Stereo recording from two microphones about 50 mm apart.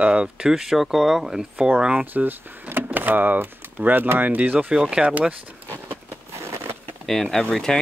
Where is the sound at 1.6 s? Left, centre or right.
Right.